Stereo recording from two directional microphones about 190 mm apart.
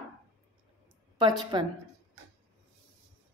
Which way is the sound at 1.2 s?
20° right (ahead or behind).